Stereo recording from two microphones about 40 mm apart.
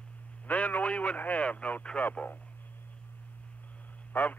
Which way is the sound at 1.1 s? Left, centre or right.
Left.